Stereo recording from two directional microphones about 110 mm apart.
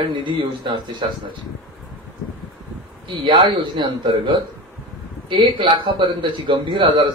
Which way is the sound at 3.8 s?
45° right (ahead or behind).